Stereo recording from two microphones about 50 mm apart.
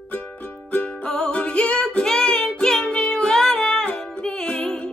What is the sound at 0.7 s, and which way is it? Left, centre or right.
Music, left.